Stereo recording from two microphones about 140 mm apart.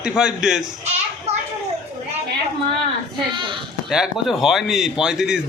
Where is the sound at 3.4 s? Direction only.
35° right (ahead or behind).